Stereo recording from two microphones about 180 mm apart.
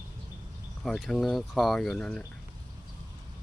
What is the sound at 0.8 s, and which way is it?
Speech, centre (ahead or behind).